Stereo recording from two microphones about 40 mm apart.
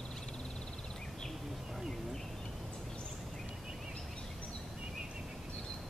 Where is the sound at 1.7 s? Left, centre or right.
Centre.